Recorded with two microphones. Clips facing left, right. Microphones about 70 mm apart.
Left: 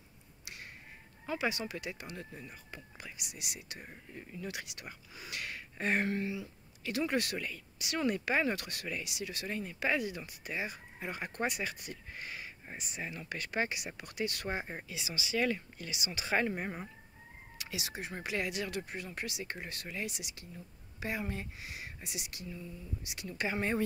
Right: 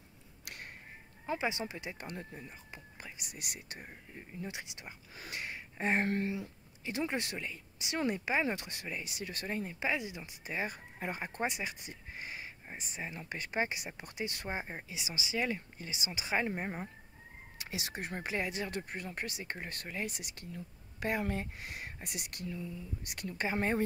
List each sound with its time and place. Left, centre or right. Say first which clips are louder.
0.5 s a sound: right 1 dB; right
1.2 s speech: even; right
4.3 s speech: left 1 dB; right
5.1 s a sound: right 1 dB; right
6.0 s speech: right 1 dB; right
6.8 s speech: left 3 dB; right
9.8 s speech: left 4 dB; centre
10.5 s speech: right 1 dB; right
11.1 s speech: left 2 dB; right
16.2 s speech: left 2 dB; centre
17.6 s speech: right 1 dB; right
23.4 s speech: right 1 dB; right